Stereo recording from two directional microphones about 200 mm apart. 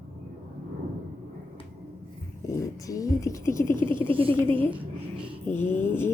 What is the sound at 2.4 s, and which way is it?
Speech, 15° left (ahead or behind).